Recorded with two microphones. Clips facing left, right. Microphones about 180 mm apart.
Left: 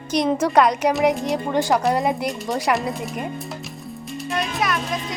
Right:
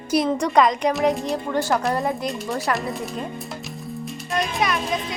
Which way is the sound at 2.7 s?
Centre (ahead or behind).